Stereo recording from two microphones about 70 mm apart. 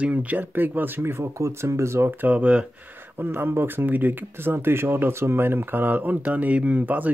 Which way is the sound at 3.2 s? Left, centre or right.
Right.